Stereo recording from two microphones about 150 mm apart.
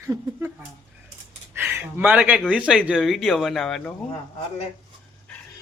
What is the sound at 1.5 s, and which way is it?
Speech, 15° right (ahead or behind).